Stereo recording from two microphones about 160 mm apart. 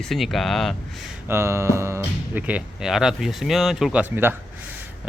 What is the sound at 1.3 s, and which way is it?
Speech, 15° right (ahead or behind).